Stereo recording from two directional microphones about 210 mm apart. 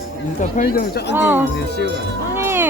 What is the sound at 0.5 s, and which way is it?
Speech, 45° left (ahead or behind).